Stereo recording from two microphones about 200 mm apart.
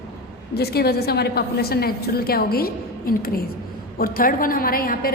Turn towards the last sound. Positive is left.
turn(degrees=45)  # may be behind; listen again after turning